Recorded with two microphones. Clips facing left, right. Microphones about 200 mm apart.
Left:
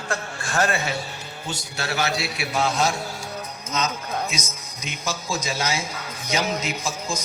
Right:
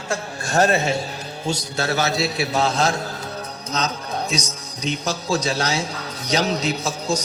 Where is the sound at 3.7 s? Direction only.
35° right (ahead or behind).